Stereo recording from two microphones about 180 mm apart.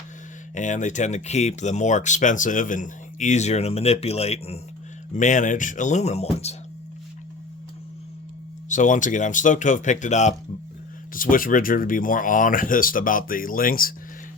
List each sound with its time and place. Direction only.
0.5 s speech: 40° left (ahead or behind)
8.7 s speech: 45° left (ahead or behind)